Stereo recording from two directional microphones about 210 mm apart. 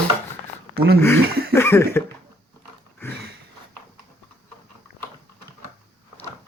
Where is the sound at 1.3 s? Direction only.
50° right (ahead or behind).